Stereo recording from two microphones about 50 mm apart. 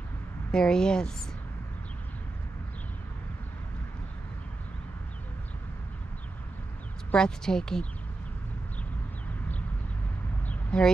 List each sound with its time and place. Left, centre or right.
0.5 s speech: centre
7.2 s speech: centre
10.7 s speech: centre